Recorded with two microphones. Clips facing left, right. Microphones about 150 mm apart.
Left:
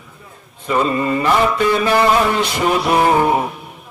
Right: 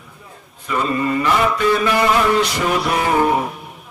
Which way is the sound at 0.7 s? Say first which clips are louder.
Left 2 dB; 30° left (ahead or behind).